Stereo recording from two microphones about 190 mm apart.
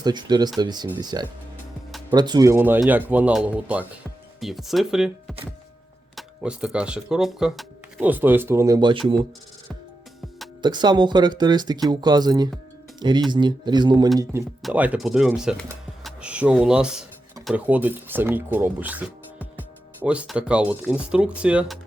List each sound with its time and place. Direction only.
0.0 s speech: 20° right (ahead or behind); by 5.1 s 5° right (ahead or behind)
6.1 s speech: 5° right (ahead or behind); by 9.0 s 20° right (ahead or behind)
10.6 s speech: 20° right (ahead or behind)
14.6 s speech: 10° right (ahead or behind)